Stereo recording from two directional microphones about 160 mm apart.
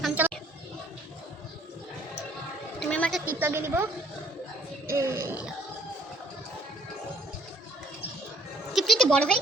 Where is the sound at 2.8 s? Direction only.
5° left (ahead or behind).